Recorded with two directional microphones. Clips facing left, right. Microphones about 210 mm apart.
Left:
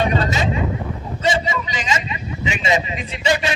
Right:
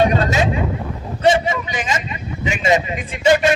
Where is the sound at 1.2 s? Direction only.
55° right (ahead or behind).